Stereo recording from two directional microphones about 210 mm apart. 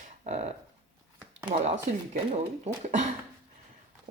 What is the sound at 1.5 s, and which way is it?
Speech, 30° right (ahead or behind).